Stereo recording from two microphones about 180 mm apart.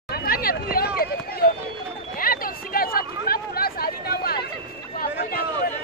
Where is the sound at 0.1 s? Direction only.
55° left (ahead or behind).